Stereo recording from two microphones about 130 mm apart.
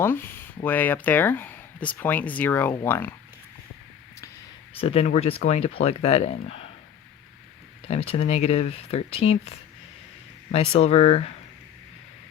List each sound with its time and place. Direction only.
0.0 s speech: 15° left (ahead or behind)
4.8 s speech: 50° left (ahead or behind)
7.9 s speech: 50° left (ahead or behind)